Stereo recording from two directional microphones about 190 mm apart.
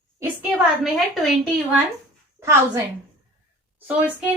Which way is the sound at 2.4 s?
15° right (ahead or behind).